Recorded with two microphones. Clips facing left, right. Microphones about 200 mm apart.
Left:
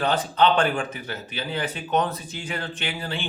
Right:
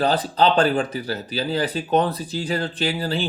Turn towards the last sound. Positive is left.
turn(degrees=-40)  # may be behind; listen again after turning